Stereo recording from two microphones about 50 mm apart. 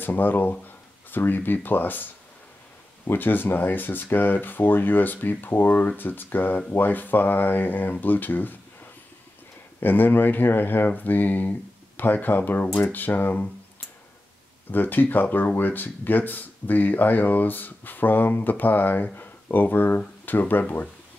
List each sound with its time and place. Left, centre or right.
0.0 s speech: left
3.1 s speech: left
9.8 s speech: left
14.7 s speech: left